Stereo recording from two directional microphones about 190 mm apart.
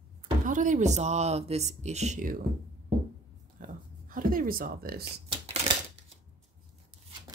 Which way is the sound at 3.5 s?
45° right (ahead or behind).